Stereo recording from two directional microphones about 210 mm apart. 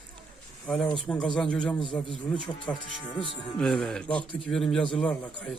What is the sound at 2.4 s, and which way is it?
Speech, 20° left (ahead or behind).